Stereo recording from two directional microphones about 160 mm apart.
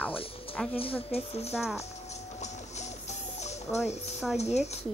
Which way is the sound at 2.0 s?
45° left (ahead or behind).